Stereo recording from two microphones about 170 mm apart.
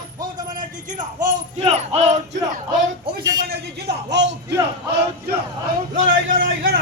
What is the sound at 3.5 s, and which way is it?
A man's voice, 85° right.